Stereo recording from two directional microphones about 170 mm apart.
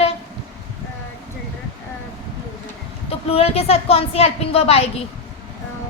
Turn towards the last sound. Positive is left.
turn(degrees=35)  # may be behind; listen again after turning